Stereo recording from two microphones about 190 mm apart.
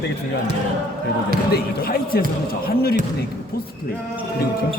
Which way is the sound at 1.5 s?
50° left (ahead or behind).